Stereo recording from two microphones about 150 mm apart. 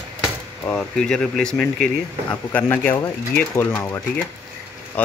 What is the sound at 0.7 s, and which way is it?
Speech, 5° left (ahead or behind).